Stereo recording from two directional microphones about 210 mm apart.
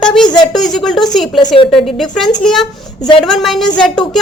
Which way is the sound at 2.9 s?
20° left (ahead or behind).